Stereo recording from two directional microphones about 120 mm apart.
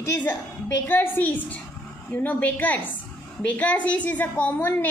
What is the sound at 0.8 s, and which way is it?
A woman's voice, 15° left (ahead or behind).